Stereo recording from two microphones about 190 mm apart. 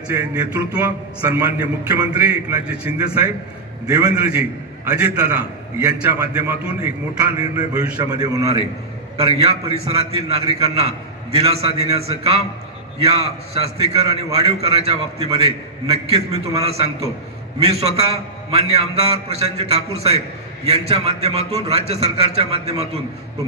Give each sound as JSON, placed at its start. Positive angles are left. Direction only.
{"t": 0.1, "sound": "a man's voice", "side_deg": -10}
{"t": 7.2, "sound": "speech", "side_deg": -20}
{"t": 9.1, "sound": "a man's voice", "side_deg": -35}
{"t": 13.0, "sound": "a man's voice", "side_deg": -30}
{"t": 19.2, "sound": "a man's voice", "side_deg": -35}